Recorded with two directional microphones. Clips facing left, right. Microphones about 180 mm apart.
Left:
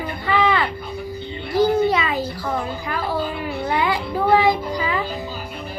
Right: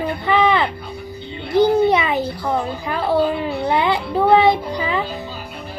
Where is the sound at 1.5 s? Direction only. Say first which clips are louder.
Right 3 dB; 20° right (ahead or behind).